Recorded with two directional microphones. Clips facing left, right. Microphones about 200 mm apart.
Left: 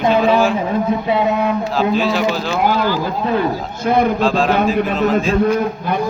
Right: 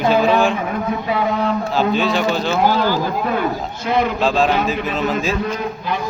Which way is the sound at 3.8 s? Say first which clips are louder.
Left 4 dB; 50° left (ahead or behind).